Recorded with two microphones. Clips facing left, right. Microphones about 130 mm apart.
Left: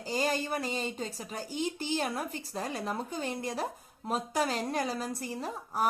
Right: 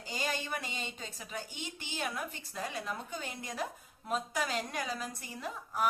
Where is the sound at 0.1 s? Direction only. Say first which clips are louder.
Left 6 dB; 40° left (ahead or behind).